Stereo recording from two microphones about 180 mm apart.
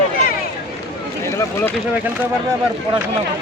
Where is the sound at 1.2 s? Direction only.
15° left (ahead or behind).